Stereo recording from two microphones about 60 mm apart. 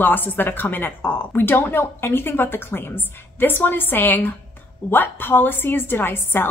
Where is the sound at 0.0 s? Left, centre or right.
Left.